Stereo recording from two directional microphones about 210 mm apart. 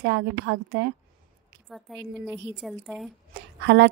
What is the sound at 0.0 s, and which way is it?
Speech, 55° right (ahead or behind).